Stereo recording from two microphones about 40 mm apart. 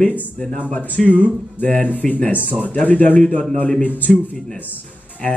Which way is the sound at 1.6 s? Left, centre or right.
Left.